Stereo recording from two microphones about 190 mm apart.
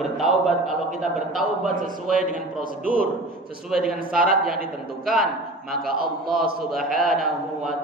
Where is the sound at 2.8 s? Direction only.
50° right (ahead or behind).